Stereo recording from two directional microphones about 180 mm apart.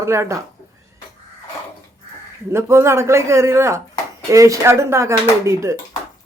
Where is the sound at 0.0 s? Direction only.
15° right (ahead or behind).